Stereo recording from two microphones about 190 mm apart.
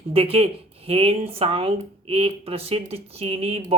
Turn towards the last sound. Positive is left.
turn(degrees=-30)  # may be behind; listen again after turning